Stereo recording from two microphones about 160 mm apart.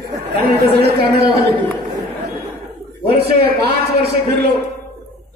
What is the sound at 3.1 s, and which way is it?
A man's voice, 75° right (ahead or behind).